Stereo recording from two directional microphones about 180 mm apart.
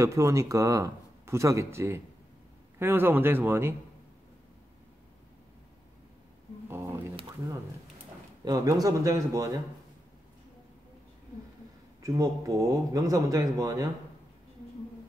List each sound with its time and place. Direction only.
0.0 s speech: 15° right (ahead or behind)
6.7 s speech: 15° right (ahead or behind)
7.2 s a sound: 20° right (ahead or behind)
8.5 s speech: 20° right (ahead or behind)
12.0 s speech: 15° right (ahead or behind)